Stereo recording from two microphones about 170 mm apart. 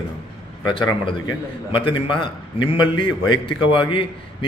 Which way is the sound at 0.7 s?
30° left (ahead or behind).